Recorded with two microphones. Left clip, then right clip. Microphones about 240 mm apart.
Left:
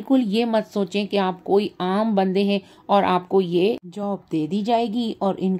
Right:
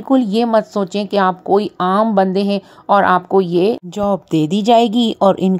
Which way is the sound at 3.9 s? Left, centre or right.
Right.